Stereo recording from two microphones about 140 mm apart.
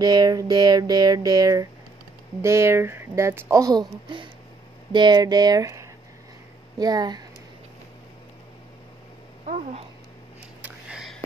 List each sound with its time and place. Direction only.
0.0 s speech: 30° right (ahead or behind)
9.5 s speech: 55° right (ahead or behind)
10.6 s a sound: 5° right (ahead or behind)